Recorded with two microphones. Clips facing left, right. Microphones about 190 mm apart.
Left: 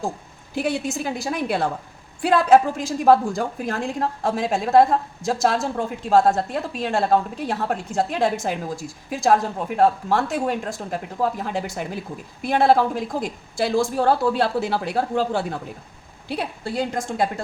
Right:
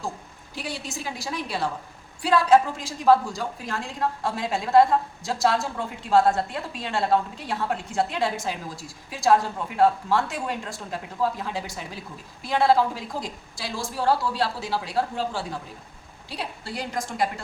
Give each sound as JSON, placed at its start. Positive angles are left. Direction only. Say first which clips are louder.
{"t": 0.5, "sound": "a woman's voice", "louder": "left 10 dB", "side_deg": 55}